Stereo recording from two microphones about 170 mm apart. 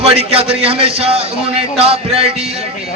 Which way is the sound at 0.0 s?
35° right (ahead or behind).